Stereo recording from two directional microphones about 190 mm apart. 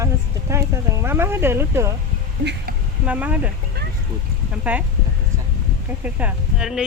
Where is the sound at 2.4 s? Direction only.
65° right (ahead or behind).